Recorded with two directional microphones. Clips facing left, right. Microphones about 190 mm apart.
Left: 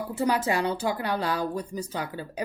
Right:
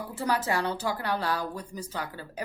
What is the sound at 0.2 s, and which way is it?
Speech, 15° left (ahead or behind).